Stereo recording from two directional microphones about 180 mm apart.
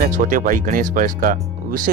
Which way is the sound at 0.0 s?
50° right (ahead or behind).